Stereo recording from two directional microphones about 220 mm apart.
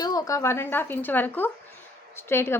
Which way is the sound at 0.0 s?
15° left (ahead or behind).